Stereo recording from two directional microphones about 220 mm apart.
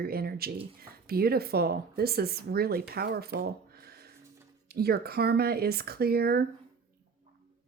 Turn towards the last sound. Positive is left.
turn(degrees=-45)  # may be behind; listen again after turning